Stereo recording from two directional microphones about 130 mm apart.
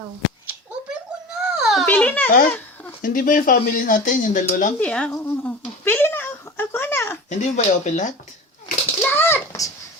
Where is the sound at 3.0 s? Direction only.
90° left.